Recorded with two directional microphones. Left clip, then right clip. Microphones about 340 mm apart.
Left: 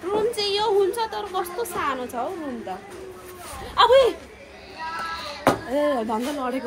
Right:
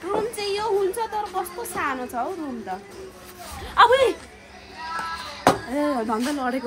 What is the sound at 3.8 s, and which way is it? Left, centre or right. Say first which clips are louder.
Speech: even; centre.